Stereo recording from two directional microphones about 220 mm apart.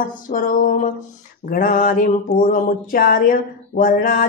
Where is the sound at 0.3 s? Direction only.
40° left (ahead or behind).